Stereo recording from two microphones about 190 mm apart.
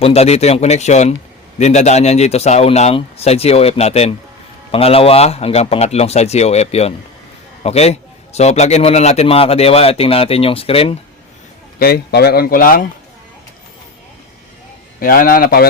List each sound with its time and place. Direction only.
0.0 s a man's voice: 35° left (ahead or behind)
11.8 s speech: 55° left (ahead or behind)
15.0 s speech: 50° left (ahead or behind)